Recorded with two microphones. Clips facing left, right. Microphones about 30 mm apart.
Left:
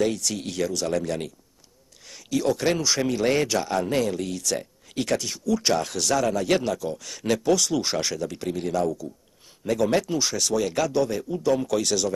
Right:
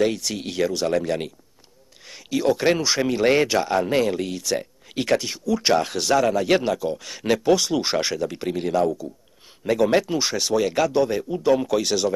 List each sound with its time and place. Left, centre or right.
0.0 s speech: centre